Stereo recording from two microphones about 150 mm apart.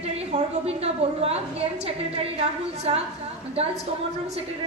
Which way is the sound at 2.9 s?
45° right (ahead or behind).